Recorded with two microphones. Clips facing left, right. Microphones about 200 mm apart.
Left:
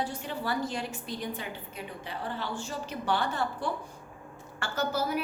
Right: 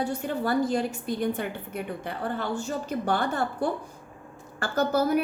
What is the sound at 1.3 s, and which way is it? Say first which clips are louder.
A woman's voice: right 8 dB; 60° right (ahead or behind).